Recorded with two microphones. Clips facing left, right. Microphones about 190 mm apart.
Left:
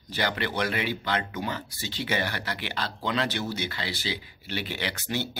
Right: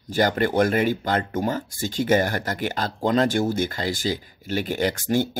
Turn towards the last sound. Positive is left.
turn(degrees=-45)  # may be behind; listen again after turning